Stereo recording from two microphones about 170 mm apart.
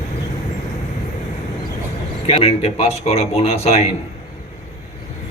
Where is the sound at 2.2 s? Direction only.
35° left (ahead or behind).